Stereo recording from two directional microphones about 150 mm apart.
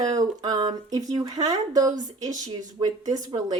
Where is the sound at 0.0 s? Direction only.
25° right (ahead or behind).